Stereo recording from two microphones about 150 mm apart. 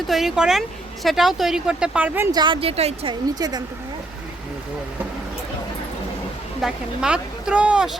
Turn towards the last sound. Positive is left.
turn(degrees=-5)  # may be behind; listen again after turning